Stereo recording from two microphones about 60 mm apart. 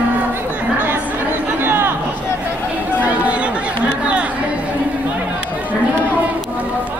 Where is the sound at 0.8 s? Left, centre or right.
Right.